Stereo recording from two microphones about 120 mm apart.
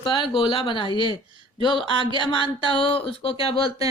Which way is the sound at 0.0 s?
45° left (ahead or behind).